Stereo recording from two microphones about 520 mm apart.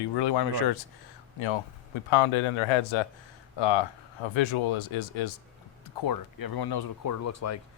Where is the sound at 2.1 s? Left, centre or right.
Left.